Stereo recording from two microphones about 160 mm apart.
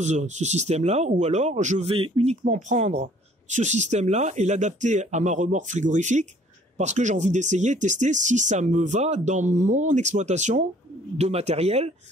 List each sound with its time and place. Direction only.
0.0 s speech: 45° right (ahead or behind)
2.4 s speech: 50° right (ahead or behind)